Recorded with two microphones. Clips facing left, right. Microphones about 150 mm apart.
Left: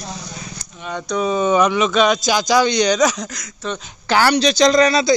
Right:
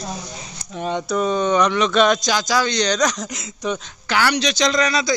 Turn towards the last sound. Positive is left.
turn(degrees=30)  # may be behind; listen again after turning